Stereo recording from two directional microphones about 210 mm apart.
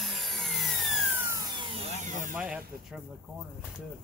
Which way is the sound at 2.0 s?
35° right (ahead or behind).